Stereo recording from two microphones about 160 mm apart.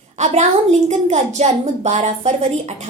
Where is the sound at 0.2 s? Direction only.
45° right (ahead or behind).